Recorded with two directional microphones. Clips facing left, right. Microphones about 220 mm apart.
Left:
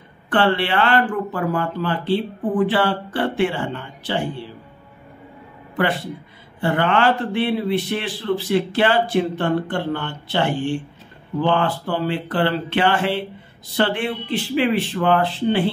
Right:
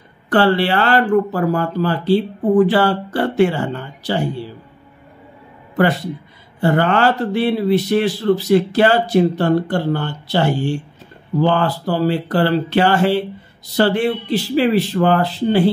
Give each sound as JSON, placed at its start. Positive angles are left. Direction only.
{"t": 0.3, "sound": "a man's voice", "side_deg": -40}
{"t": 5.8, "sound": "a man's voice", "side_deg": -40}